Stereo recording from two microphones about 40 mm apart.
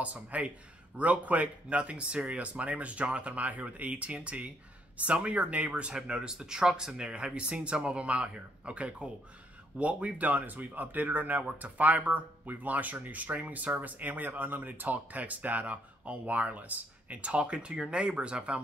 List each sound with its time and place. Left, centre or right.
0.0 s speech: right
5.9 s speech: centre